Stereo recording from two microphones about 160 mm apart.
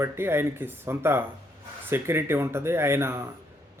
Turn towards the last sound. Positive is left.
turn(degrees=-15)  # may be behind; listen again after turning